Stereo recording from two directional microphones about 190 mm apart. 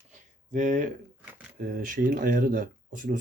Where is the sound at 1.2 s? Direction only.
10° right (ahead or behind).